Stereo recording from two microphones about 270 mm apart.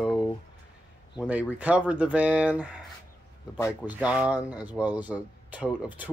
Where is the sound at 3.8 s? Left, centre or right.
Centre.